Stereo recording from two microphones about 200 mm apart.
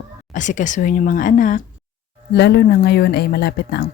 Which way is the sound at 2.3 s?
55° left (ahead or behind).